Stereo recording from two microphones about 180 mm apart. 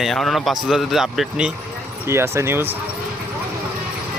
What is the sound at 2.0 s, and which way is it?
Speech, 15° right (ahead or behind).